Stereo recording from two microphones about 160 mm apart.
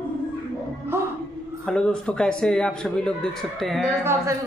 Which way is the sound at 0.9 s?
15° right (ahead or behind).